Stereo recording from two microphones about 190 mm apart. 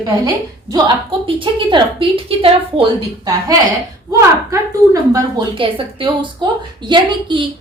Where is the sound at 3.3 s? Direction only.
20° right (ahead or behind).